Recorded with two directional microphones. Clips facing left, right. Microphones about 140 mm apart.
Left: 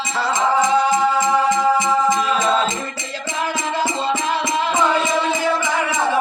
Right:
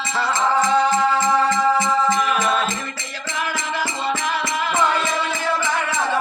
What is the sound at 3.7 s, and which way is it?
Music, 20° left (ahead or behind).